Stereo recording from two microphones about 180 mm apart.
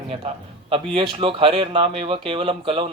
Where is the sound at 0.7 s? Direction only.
30° right (ahead or behind).